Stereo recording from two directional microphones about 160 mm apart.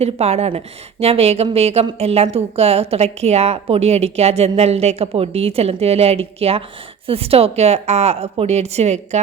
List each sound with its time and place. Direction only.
0.0 s a woman's voice: 40° right (ahead or behind)